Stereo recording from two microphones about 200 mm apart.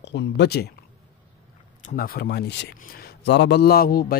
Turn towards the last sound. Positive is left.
turn(degrees=50)  # may be behind; listen again after turning